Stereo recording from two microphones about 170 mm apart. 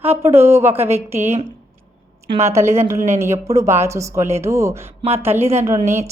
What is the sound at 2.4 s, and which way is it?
A woman's voice, 15° right (ahead or behind).